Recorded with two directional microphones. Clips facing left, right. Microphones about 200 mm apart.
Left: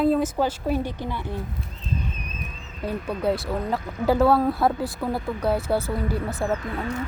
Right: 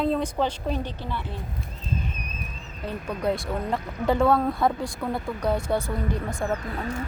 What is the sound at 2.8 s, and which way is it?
Speech, 5° left (ahead or behind).